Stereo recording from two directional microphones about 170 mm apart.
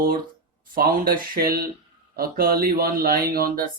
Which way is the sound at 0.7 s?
60° right (ahead or behind).